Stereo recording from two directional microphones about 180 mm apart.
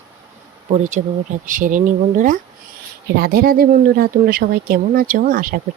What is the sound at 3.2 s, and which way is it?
Speech, 55° right (ahead or behind).